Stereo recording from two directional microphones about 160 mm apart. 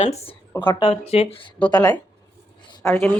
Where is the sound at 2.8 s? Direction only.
15° left (ahead or behind).